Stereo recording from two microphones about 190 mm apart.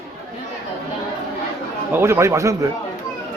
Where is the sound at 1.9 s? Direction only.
15° right (ahead or behind).